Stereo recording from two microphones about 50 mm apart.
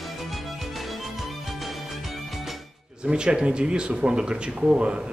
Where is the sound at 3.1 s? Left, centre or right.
Centre.